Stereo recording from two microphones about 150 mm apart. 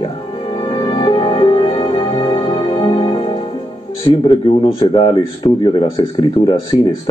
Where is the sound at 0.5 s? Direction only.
30° left (ahead or behind).